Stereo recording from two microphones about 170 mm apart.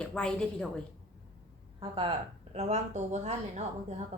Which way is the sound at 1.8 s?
35° right (ahead or behind).